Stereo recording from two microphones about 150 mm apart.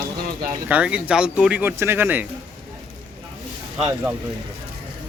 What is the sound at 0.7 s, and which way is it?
Speech, 10° right (ahead or behind).